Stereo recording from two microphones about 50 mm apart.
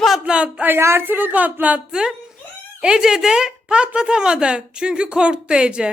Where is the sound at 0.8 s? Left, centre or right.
Right.